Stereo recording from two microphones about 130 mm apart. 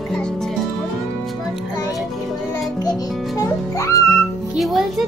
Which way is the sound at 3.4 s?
25° left (ahead or behind).